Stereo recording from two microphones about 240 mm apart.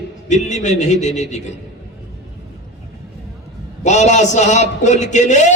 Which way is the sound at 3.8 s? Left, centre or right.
Left.